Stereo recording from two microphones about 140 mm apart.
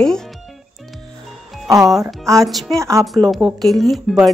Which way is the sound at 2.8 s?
20° right (ahead or behind).